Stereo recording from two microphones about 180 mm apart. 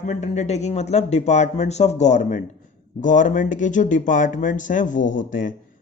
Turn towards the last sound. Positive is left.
turn(degrees=45)  # may be behind; listen again after turning